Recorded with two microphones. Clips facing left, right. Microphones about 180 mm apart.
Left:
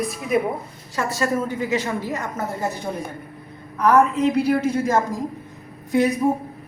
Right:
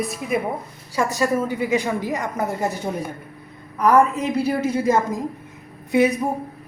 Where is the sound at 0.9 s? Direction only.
15° right (ahead or behind).